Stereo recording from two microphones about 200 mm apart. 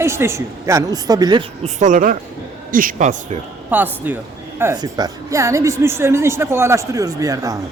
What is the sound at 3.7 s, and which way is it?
A man's voice, 10° right (ahead or behind).